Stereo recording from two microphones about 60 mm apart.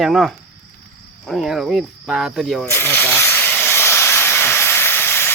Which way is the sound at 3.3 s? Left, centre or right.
Left.